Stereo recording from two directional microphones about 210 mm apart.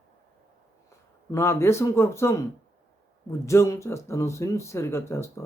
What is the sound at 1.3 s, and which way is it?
Speech, 10° left (ahead or behind).